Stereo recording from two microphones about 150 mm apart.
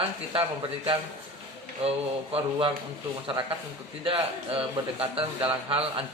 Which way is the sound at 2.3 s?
35° right (ahead or behind).